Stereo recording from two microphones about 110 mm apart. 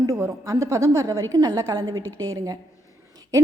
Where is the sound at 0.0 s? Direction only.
30° right (ahead or behind).